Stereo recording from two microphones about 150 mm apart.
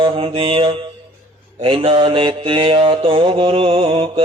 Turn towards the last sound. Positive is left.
turn(degrees=-40)  # may be behind; listen again after turning